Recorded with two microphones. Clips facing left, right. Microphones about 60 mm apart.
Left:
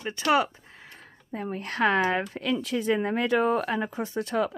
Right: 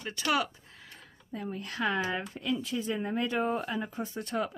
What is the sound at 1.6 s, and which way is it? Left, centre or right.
Speech, left.